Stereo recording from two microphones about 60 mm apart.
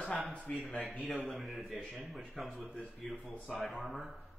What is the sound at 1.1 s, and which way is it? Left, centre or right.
Speech, centre.